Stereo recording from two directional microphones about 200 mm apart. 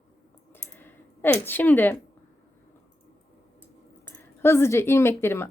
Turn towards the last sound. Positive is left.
turn(degrees=10)  # may be behind; listen again after turning